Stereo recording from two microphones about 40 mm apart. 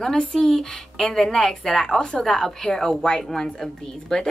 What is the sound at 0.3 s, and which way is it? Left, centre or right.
A woman's voice, centre.